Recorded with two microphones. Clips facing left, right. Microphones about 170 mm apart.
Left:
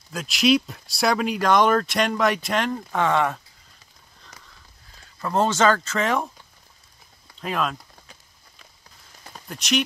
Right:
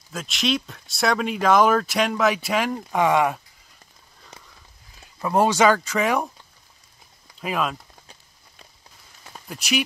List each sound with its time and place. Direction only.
0.1 s speech: centre (ahead or behind)
4.3 s a sound: 25° right (ahead or behind)
5.2 s speech: 10° right (ahead or behind)
7.3 s speech: 5° right (ahead or behind)
9.5 s speech: 5° right (ahead or behind)